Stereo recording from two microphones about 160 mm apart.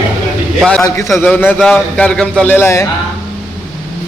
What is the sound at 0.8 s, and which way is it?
Speech, 20° left (ahead or behind).